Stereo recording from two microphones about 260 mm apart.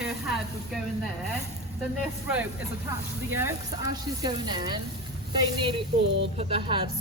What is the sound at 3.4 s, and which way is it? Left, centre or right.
Speech, centre.